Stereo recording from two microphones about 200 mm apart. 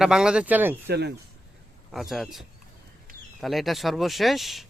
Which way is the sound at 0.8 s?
55° right (ahead or behind).